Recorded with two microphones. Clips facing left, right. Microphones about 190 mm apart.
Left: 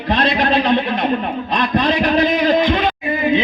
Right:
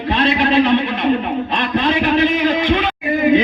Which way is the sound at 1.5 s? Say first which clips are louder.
Left 2 dB; 40° left (ahead or behind).